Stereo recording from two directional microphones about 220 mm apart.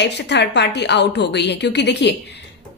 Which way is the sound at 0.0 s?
50° left (ahead or behind).